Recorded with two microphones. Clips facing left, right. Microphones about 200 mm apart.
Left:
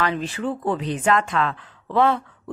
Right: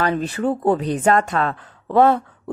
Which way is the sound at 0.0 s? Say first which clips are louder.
Right 4 dB; 45° right (ahead or behind).